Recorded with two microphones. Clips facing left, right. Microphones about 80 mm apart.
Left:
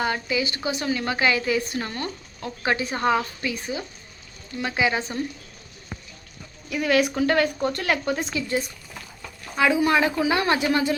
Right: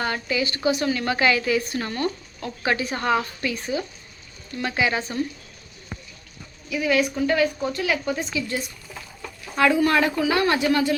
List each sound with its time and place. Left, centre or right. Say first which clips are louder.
0.0 s speech: even; centre
6.7 s speech: left 1 dB; left
9.6 s speech: right 1 dB; centre